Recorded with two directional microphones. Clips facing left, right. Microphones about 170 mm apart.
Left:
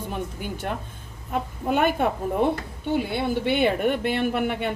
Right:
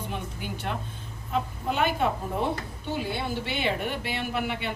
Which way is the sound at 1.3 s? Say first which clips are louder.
Left 4 dB; 50° left (ahead or behind).